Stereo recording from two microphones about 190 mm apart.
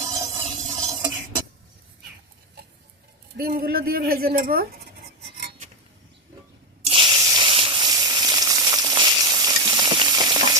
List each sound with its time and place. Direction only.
0.1 s music: 25° right (ahead or behind)
3.3 s speech: 50° right (ahead or behind)
6.8 s a sound: 25° right (ahead or behind)